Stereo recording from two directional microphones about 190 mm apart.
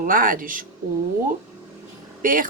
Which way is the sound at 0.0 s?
45° right (ahead or behind).